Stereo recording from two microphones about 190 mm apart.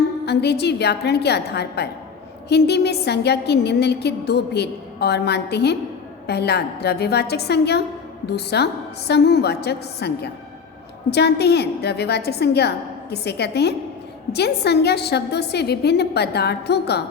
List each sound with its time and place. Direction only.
0.3 s a woman's voice: 60° left (ahead or behind)